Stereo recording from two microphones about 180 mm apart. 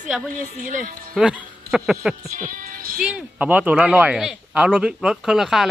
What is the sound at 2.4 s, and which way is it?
Music, 50° right (ahead or behind).